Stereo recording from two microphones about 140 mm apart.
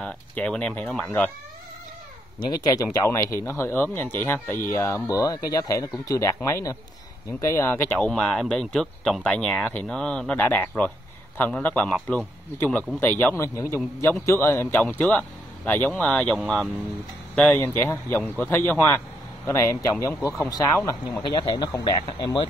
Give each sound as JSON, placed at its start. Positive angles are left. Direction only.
{"t": 0.0, "sound": "speech", "side_deg": 10}
{"t": 2.4, "sound": "speech", "side_deg": 30}
{"t": 20.7, "sound": "speech", "side_deg": 15}
{"t": 21.3, "sound": "speech", "side_deg": 30}